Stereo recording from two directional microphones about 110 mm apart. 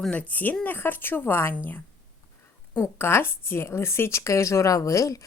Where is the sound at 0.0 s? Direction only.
10° left (ahead or behind).